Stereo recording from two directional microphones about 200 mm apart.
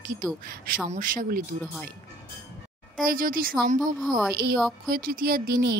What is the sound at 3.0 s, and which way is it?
Speech, 45° right (ahead or behind).